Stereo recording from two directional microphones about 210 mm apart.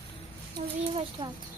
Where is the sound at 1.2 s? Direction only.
25° right (ahead or behind).